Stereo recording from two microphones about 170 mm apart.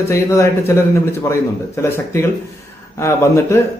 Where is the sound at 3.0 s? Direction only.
15° left (ahead or behind).